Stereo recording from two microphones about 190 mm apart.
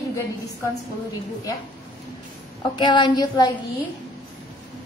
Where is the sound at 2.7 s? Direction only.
25° left (ahead or behind).